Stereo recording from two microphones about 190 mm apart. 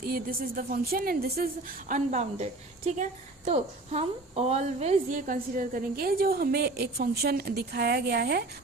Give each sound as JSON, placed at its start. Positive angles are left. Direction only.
{"t": 0.0, "sound": "a woman's voice", "side_deg": -50}
{"t": 1.9, "sound": "a woman's voice", "side_deg": -40}